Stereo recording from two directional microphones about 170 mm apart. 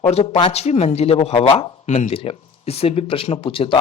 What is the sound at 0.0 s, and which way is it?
Speech, 40° left (ahead or behind).